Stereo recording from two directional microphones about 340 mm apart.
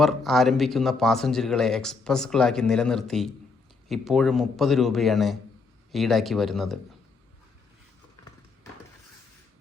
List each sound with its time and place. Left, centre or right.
0.0 s speech: centre